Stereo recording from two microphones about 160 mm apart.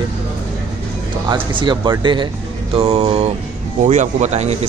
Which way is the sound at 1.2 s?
30° right (ahead or behind).